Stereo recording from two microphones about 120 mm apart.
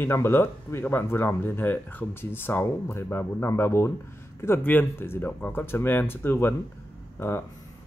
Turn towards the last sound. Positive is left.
turn(degrees=20)  # may be behind; listen again after turning